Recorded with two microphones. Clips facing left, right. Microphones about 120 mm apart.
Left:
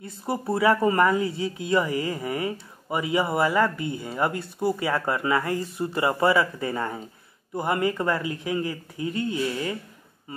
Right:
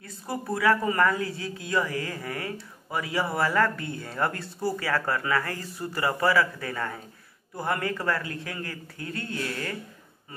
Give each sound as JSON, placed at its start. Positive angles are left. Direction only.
{"t": 0.0, "sound": "speech", "side_deg": 25}